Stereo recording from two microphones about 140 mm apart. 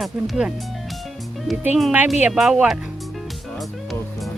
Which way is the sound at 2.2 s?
5° right (ahead or behind).